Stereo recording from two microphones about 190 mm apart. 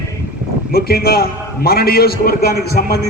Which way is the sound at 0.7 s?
55° left (ahead or behind).